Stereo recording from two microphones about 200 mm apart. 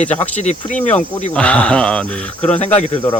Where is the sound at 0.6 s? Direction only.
25° left (ahead or behind).